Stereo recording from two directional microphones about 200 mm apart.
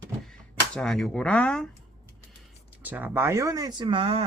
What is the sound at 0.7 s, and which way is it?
Speech, 5° left (ahead or behind).